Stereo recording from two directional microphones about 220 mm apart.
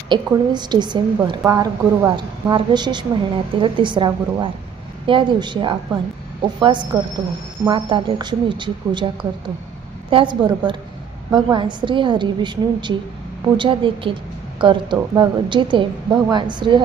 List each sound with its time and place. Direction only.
0.1 s a woman's voice: 20° right (ahead or behind)